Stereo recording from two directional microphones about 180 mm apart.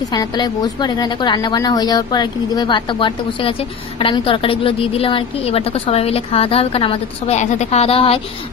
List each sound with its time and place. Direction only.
0.1 s a woman's voice: 25° left (ahead or behind)